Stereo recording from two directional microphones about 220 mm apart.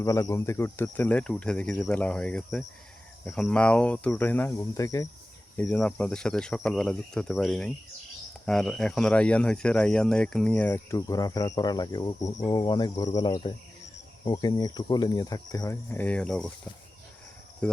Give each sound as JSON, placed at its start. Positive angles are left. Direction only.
{"t": 0.0, "sound": "speech", "side_deg": 15}
{"t": 17.6, "sound": "speech", "side_deg": 5}